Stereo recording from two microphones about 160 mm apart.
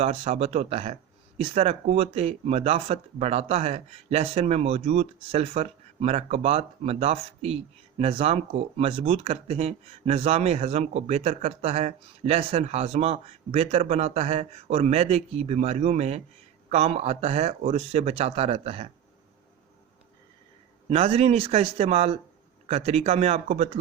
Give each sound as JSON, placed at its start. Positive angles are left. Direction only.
{"t": 0.0, "sound": "speech", "side_deg": -40}
{"t": 20.9, "sound": "speech", "side_deg": -40}